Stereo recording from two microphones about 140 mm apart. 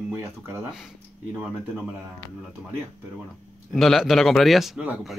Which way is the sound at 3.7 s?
Centre (ahead or behind).